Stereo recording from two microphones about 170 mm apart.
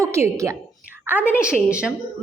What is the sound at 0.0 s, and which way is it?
Speech, 15° right (ahead or behind).